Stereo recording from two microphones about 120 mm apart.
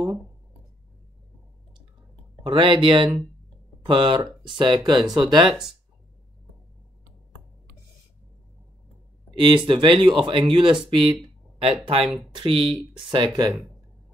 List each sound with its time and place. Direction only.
2.4 s speech: 40° right (ahead or behind)
9.4 s speech: 45° right (ahead or behind)